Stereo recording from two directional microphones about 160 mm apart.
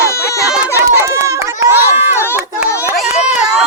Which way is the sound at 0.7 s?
20° right (ahead or behind).